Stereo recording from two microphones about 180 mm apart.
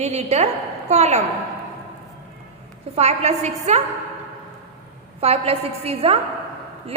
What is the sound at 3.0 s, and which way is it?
Speech, 35° right (ahead or behind).